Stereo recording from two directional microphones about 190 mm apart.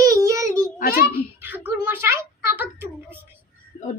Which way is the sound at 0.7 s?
50° left (ahead or behind).